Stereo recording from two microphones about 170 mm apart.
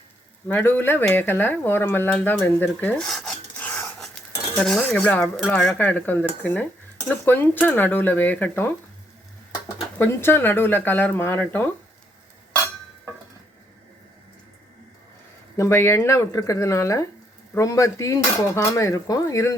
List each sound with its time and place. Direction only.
0.4 s speech: 10° left (ahead or behind)
10.0 s speech: 15° left (ahead or behind)
15.5 s speech: 15° left (ahead or behind)